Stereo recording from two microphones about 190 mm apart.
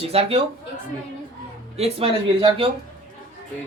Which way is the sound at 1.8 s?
30° right (ahead or behind).